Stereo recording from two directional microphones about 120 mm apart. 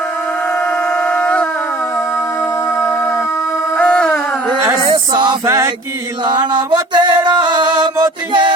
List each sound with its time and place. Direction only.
1.0 s howl: 10° left (ahead or behind)
3.8 s a sound: 10° left (ahead or behind)
5.1 s music: 40° right (ahead or behind)
5.5 s mantra: 25° right (ahead or behind)
6.2 s music: 35° right (ahead or behind)